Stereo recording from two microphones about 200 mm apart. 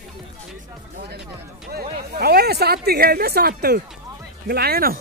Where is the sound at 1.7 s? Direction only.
50° right (ahead or behind).